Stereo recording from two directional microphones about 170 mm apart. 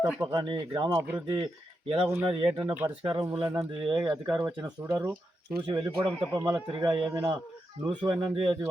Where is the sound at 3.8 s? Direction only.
25° right (ahead or behind).